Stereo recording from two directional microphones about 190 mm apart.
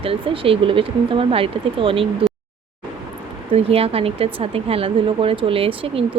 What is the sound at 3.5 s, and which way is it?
Speech, 30° right (ahead or behind).